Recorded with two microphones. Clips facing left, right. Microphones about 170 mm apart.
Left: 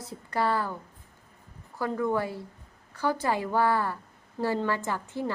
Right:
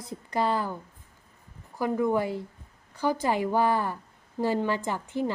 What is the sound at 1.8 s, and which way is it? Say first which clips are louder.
Speech: right 2 dB; 15° right (ahead or behind).